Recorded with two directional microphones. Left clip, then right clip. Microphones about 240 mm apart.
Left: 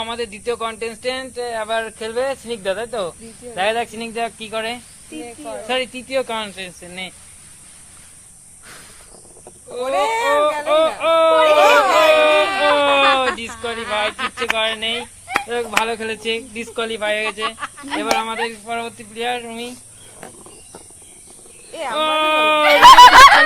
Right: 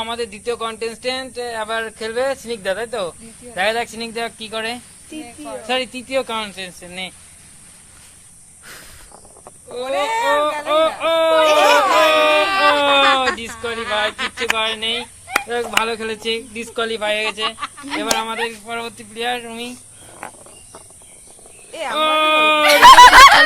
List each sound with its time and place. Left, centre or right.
0.0 s fowl: centre
8.6 s a sound: centre
10.0 s speech: centre
10.7 s fowl: right
11.6 s speech: centre
12.0 s fowl: right
21.7 s fowl: right